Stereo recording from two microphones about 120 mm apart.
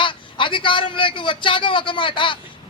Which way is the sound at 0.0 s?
45° left (ahead or behind).